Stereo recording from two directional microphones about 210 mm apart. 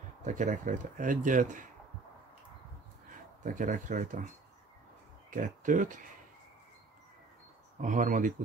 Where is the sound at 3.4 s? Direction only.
40° right (ahead or behind).